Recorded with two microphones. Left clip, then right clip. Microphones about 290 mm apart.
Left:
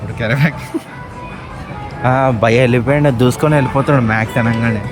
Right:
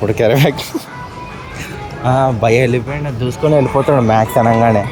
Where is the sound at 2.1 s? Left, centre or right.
Left.